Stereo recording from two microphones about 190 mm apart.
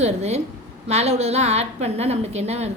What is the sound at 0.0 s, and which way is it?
A woman's voice, 35° right (ahead or behind).